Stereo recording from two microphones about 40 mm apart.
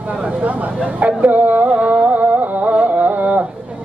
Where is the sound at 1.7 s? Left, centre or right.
Right.